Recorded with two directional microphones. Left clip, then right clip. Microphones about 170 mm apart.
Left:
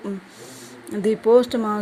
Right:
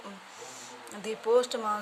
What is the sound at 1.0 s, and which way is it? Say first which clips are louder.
Speech: left 10 dB; 35° left (ahead or behind).